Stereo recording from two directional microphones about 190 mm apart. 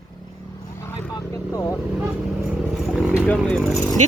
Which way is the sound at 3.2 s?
5° left (ahead or behind).